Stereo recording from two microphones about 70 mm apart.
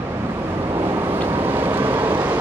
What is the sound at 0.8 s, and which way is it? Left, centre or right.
Vehicle, right.